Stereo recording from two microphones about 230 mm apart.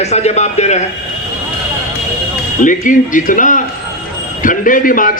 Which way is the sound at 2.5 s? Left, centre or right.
Left.